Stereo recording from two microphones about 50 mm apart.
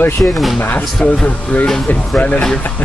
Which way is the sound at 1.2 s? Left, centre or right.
Left.